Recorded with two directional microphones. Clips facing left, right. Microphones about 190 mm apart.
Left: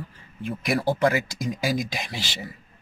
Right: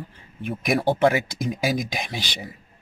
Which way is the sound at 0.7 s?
20° right (ahead or behind).